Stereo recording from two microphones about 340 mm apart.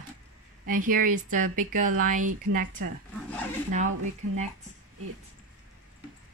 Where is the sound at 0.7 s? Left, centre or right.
Right.